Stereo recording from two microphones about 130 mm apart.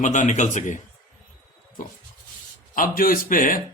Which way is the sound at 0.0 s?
65° left (ahead or behind).